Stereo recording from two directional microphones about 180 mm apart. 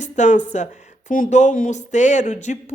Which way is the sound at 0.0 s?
45° left (ahead or behind).